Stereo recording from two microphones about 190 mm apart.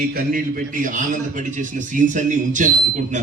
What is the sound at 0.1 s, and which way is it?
A man's voice, 50° right (ahead or behind).